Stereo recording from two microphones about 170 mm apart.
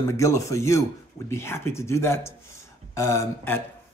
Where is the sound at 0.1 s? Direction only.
15° left (ahead or behind).